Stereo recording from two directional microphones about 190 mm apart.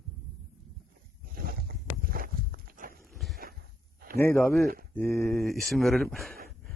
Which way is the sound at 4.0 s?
50° right (ahead or behind).